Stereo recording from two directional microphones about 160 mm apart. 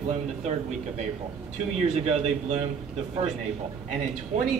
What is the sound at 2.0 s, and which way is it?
Speech, 40° right (ahead or behind).